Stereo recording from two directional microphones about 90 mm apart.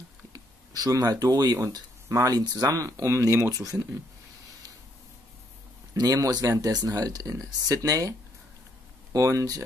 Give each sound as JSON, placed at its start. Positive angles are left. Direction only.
{"t": 0.3, "sound": "speech", "side_deg": -40}
{"t": 5.9, "sound": "speech", "side_deg": -40}
{"t": 9.1, "sound": "speech", "side_deg": -35}